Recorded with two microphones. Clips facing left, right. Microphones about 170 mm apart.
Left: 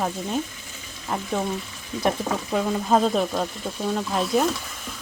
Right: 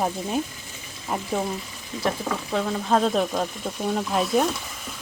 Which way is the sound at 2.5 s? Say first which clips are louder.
Left 1 dB; 5° left (ahead or behind).